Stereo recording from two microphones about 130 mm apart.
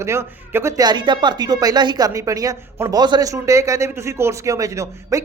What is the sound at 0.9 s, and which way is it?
Speech, 35° right (ahead or behind).